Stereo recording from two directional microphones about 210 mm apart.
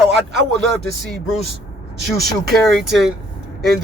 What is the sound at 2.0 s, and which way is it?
Speech, 45° right (ahead or behind).